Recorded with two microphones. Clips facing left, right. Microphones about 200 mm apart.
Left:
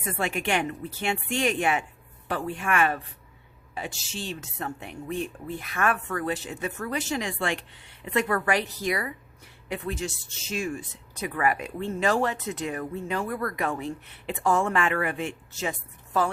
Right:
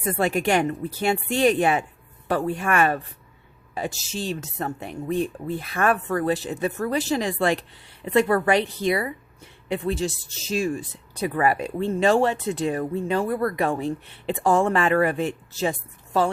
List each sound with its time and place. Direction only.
0.0 s speech: 35° right (ahead or behind)